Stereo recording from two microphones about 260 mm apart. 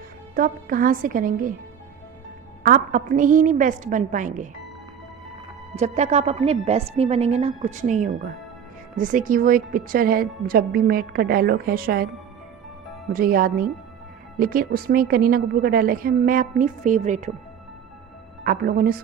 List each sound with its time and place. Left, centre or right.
0.4 s a woman's voice: right
2.6 s a woman's voice: right
5.8 s a woman's voice: right
13.1 s a woman's voice: right
18.4 s a woman's voice: right